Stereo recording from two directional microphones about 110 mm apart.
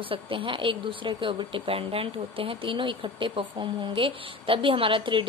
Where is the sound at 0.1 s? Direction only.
50° right (ahead or behind).